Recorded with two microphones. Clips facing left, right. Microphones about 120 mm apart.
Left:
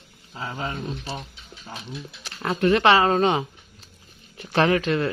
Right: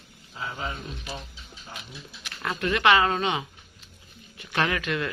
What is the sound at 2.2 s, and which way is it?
Speech, 30° left (ahead or behind).